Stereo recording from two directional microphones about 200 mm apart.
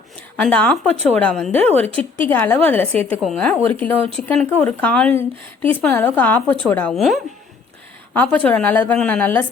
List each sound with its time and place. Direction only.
0.4 s a woman's voice: 5° left (ahead or behind)
1.7 s a woman's voice: 30° right (ahead or behind)
2.2 s a woman's voice: 10° left (ahead or behind)